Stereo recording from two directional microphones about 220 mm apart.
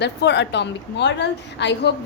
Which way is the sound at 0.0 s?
50° left (ahead or behind).